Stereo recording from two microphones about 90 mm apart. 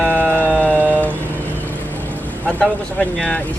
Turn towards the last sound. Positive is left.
turn(degrees=15)  # may be behind; listen again after turning